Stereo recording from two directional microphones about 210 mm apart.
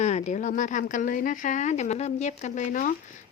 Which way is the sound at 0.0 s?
35° left (ahead or behind).